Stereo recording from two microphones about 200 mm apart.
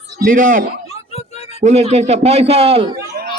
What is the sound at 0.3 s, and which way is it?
Speech, 40° right (ahead or behind).